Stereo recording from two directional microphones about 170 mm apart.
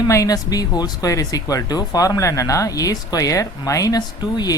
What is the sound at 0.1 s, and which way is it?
Speech, 20° left (ahead or behind).